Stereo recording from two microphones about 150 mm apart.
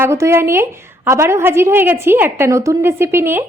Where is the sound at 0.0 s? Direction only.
20° right (ahead or behind).